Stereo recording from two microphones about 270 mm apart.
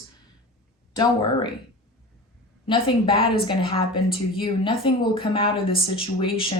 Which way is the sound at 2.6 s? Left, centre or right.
Centre.